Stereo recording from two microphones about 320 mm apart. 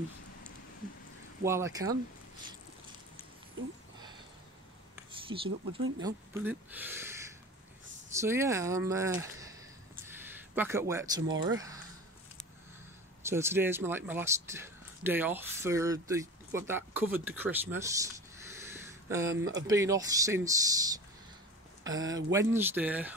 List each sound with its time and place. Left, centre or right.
1.4 s speech: centre
5.3 s speech: centre
6.0 s speech: centre
10.0 s a sound: centre
11.4 s speech: centre
13.2 s speech: centre
18.7 s a sound: centre
19.7 s speech: centre